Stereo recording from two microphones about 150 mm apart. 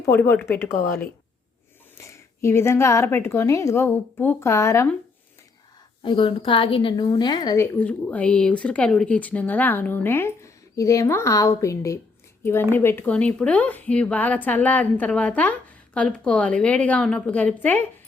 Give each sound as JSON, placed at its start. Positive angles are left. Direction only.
{"t": 0.0, "sound": "a woman's voice", "side_deg": 15}
{"t": 2.0, "sound": "a woman's voice", "side_deg": 20}
{"t": 6.0, "sound": "a woman's voice", "side_deg": 35}